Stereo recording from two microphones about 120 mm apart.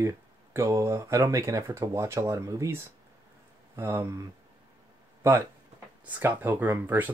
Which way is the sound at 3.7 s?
20° right (ahead or behind).